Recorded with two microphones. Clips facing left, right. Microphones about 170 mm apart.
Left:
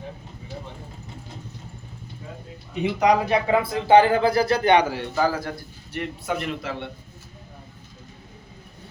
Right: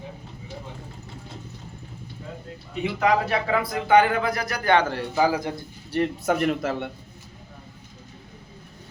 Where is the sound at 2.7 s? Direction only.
20° left (ahead or behind).